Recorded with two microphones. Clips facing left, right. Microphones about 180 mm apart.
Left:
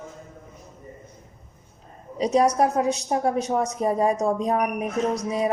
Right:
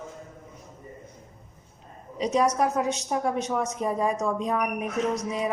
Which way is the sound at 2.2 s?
35° left (ahead or behind).